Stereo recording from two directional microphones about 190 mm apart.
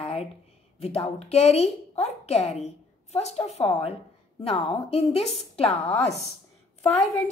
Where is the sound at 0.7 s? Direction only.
30° left (ahead or behind).